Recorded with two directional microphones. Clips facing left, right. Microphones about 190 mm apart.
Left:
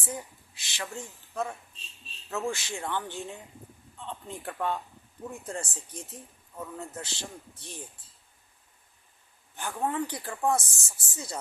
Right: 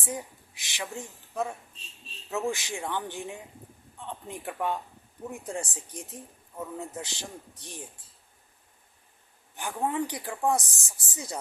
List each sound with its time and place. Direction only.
0.0 s a man's voice: 15° right (ahead or behind)
9.6 s speech: 15° right (ahead or behind)